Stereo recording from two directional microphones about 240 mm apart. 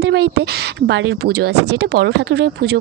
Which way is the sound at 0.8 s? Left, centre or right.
Right.